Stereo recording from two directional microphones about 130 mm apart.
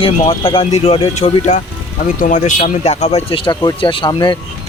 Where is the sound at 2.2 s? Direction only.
75° left (ahead or behind).